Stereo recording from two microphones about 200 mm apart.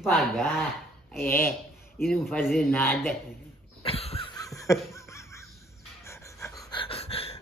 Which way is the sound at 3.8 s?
30° left (ahead or behind).